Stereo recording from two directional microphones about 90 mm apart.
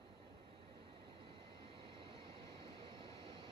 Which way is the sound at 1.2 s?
80° right.